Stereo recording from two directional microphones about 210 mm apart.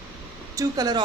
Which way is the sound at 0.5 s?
20° right (ahead or behind).